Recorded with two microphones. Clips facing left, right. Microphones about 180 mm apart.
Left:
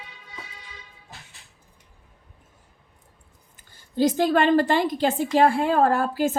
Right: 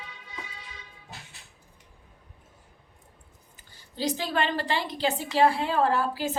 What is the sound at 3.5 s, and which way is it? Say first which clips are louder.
A woman's voice: left 12 dB; 50° left (ahead or behind).